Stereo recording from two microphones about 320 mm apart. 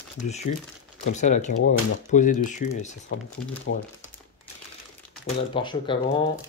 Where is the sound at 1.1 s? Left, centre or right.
Left.